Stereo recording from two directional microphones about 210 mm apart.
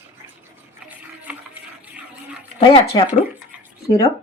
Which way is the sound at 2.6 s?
25° left (ahead or behind).